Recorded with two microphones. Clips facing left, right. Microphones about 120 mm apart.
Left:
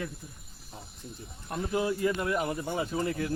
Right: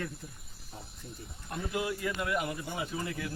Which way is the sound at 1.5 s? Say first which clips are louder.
Left 5 dB; 35° left (ahead or behind).